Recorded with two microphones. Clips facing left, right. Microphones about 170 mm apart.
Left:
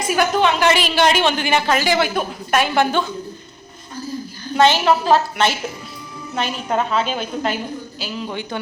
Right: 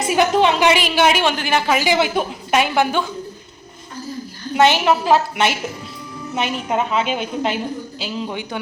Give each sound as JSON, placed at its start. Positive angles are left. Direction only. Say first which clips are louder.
{"t": 0.0, "sound": "a woman's voice", "louder": "right 2 dB", "side_deg": -25}
{"t": 0.6, "sound": "a woman's voice", "louder": "right 1 dB", "side_deg": -15}
{"t": 4.5, "sound": "a woman's voice", "louder": "even", "side_deg": -15}